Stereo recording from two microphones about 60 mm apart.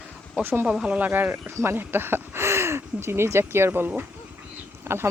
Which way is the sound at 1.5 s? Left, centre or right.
Right.